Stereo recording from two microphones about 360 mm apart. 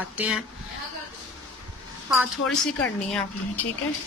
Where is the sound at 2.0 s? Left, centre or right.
Centre.